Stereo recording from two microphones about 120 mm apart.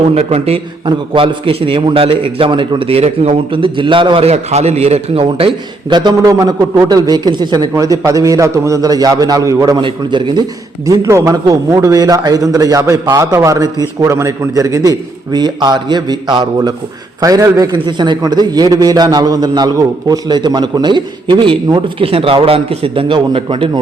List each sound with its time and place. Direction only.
0.1 s a man's voice: 60° right (ahead or behind)
0.9 s a man's voice: 45° right (ahead or behind)
7.7 s a man's voice: 25° right (ahead or behind)
9.8 s a man's voice: 40° right (ahead or behind)
10.8 s a man's voice: 25° right (ahead or behind); by 23.8 s 45° right (ahead or behind)